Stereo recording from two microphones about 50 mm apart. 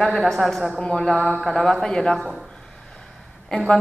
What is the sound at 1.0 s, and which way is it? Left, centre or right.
Speech, centre.